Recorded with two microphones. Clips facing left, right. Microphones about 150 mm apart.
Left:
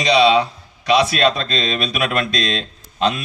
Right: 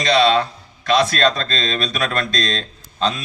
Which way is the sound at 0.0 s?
10° left (ahead or behind).